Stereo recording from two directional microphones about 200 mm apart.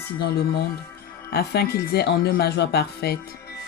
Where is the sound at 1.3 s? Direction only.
50° left (ahead or behind).